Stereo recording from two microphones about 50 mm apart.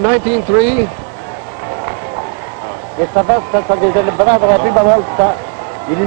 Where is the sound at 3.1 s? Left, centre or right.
Right.